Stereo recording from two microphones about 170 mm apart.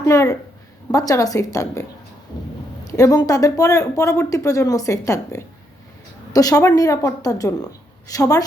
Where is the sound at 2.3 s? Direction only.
25° left (ahead or behind).